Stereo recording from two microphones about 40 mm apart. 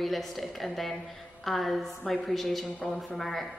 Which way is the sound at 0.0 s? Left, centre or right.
Centre.